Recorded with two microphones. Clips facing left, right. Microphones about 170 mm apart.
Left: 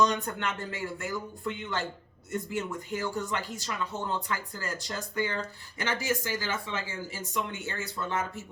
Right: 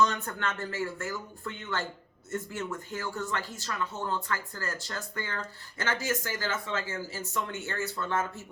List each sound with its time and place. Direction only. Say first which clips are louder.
0.0 s speech: left 1 dB; 15° left (ahead or behind)